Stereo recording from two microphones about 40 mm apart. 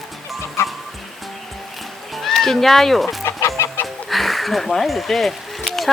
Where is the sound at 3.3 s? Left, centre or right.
Left.